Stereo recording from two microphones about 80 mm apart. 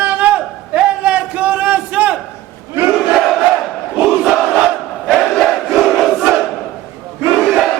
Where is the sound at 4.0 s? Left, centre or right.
Centre.